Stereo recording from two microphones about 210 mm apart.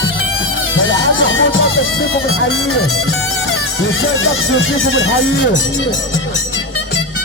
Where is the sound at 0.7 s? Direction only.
65° left (ahead or behind); by 2.8 s 80° left.